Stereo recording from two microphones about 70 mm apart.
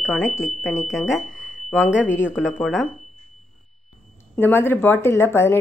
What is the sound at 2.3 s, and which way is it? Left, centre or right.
Speech, centre.